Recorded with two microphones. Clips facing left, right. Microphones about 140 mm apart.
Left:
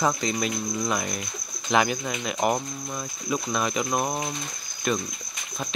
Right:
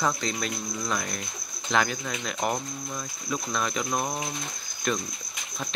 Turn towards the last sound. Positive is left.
turn(degrees=5)  # may be behind; listen again after turning